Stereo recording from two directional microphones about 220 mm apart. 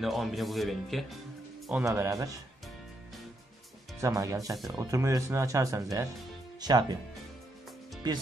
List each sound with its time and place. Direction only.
0.0 s speech: centre (ahead or behind)
4.0 s speech: 15° right (ahead or behind)